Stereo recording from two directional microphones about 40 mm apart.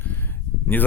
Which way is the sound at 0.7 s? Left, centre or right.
Left.